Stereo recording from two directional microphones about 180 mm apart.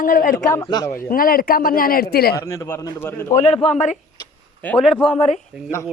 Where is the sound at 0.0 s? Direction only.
50° left (ahead or behind).